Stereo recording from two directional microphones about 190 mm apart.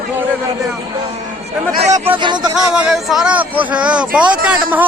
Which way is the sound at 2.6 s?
Centre (ahead or behind).